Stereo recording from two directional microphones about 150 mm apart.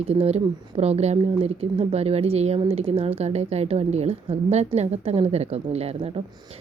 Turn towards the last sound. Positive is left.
turn(degrees=-40)  # may be behind; listen again after turning